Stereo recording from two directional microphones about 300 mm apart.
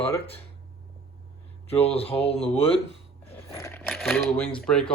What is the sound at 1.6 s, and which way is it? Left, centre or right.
Speech, centre.